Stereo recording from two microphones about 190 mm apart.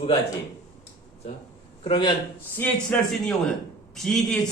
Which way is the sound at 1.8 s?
25° left (ahead or behind).